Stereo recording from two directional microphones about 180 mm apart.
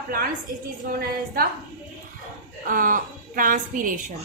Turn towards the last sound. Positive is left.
turn(degrees=-45)  # may be behind; listen again after turning